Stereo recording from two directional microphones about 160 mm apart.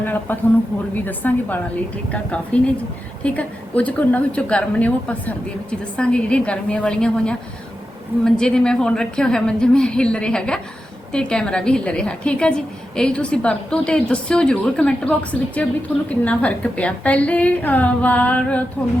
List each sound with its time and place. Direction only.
0.0 s a woman's voice: 10° left (ahead or behind)